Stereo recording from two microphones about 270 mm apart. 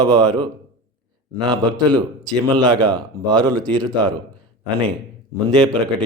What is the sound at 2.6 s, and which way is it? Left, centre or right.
Speech, centre.